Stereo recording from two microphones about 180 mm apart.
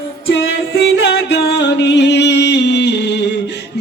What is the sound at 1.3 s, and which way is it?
Music, 70° left (ahead or behind).